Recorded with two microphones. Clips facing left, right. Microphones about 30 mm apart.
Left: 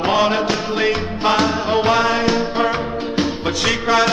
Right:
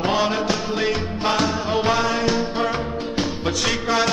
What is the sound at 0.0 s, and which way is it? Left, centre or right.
Music, centre.